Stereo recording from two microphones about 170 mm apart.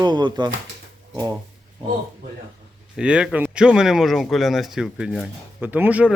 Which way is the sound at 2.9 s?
5° right (ahead or behind).